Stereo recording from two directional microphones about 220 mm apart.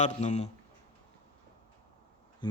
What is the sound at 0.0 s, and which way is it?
Speech, 30° left (ahead or behind).